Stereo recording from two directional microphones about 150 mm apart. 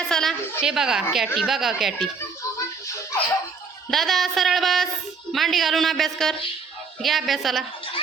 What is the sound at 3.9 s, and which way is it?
Speech, centre (ahead or behind).